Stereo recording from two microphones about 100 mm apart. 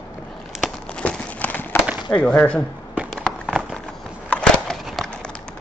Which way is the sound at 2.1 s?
15° left (ahead or behind).